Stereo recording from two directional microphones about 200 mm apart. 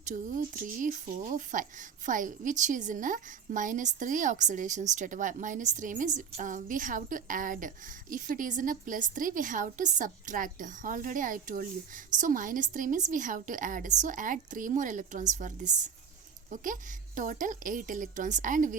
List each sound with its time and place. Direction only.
0.1 s a woman's voice: 40° right (ahead or behind)
17.2 s a woman's voice: 40° right (ahead or behind)